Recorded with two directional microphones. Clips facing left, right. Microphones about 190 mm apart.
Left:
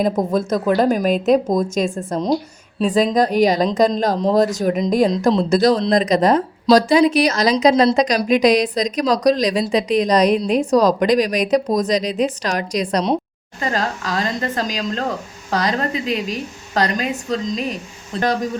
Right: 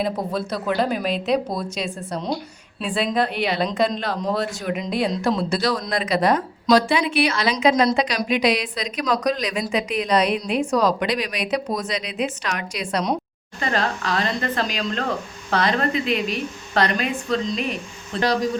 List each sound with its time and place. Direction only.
0.0 s a woman's voice: 45° left (ahead or behind)